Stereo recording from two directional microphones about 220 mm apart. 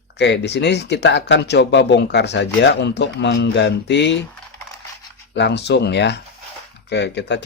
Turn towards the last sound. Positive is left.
turn(degrees=50)  # may be behind; listen again after turning